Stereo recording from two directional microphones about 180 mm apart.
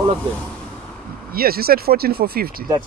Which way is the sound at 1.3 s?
55° right (ahead or behind).